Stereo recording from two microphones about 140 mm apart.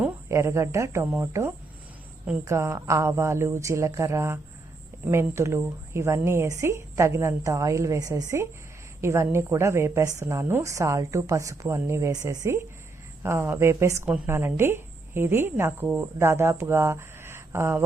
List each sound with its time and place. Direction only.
0.0 s a woman's voice: 20° right (ahead or behind)